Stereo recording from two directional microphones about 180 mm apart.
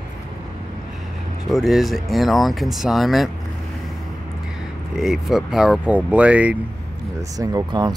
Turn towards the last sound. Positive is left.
turn(degrees=-25)  # may be behind; listen again after turning